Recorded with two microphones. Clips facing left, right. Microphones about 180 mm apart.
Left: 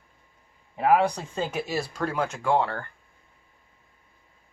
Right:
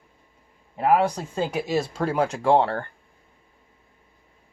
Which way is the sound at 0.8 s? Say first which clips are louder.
Right 1 dB; 5° right (ahead or behind).